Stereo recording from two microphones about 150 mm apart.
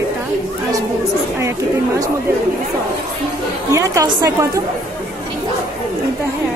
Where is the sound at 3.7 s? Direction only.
20° right (ahead or behind).